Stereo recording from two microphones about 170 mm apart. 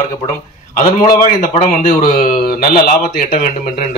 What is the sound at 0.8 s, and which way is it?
A man's voice, 55° left (ahead or behind).